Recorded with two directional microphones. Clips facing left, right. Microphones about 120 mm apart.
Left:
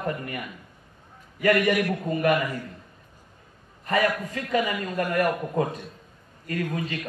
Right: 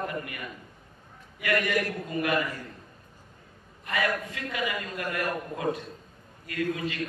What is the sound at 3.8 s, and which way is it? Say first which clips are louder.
A man's voice: left 5 dB; 40° left (ahead or behind).